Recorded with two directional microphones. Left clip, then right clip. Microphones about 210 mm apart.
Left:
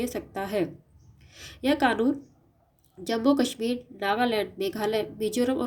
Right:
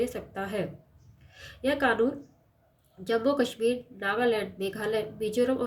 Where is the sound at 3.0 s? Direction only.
40° left (ahead or behind).